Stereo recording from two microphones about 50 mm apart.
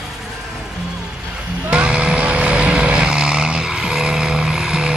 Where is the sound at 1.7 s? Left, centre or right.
Centre.